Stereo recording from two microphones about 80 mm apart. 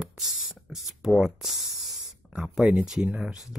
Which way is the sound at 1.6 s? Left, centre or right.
Centre.